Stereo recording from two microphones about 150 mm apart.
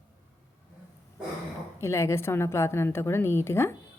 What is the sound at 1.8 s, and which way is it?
A woman's voice, 20° left (ahead or behind).